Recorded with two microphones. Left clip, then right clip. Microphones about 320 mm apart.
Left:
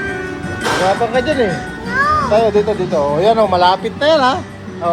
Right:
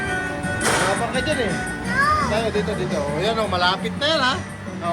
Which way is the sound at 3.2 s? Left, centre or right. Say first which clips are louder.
Left 9 dB; left.